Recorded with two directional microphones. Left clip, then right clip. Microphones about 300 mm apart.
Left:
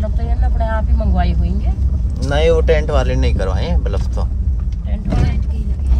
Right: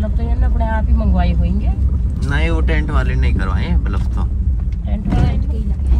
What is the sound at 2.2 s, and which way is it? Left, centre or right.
Speech, left.